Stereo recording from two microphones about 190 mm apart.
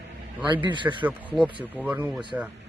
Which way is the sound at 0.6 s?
25° right (ahead or behind).